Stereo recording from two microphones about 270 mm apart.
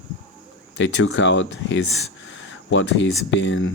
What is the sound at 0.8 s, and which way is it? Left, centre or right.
Speech, left.